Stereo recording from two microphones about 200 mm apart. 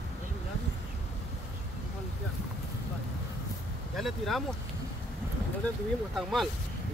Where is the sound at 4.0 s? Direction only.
Centre (ahead or behind).